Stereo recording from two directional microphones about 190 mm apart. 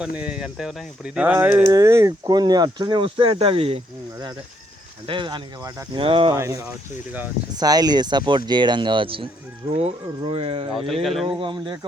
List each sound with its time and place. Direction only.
0.0 s speech: 5° right (ahead or behind); by 3.8 s 30° right (ahead or behind)
5.0 s speech: 25° right (ahead or behind)
6.3 s speech: 15° right (ahead or behind); by 10.7 s 30° right (ahead or behind)
10.8 s speech: centre (ahead or behind)
11.3 s speech: 25° right (ahead or behind)